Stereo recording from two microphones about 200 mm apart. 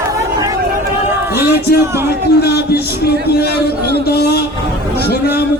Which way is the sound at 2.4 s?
55° left (ahead or behind).